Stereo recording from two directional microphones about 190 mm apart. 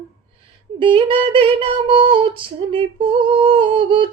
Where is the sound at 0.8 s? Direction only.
25° right (ahead or behind).